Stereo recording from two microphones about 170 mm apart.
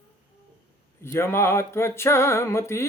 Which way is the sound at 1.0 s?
15° left (ahead or behind).